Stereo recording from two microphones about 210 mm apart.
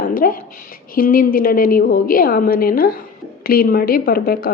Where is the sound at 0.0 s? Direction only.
40° left (ahead or behind).